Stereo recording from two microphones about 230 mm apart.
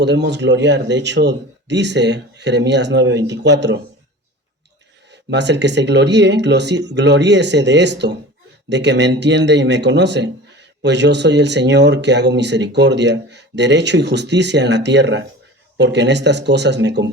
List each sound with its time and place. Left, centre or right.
0.0 s speech: right
5.1 s speech: right